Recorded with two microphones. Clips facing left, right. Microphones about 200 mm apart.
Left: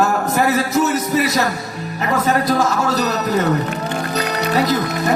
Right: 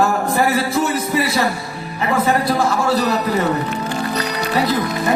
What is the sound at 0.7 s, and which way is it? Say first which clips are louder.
Music: left 2 dB; 45° left (ahead or behind).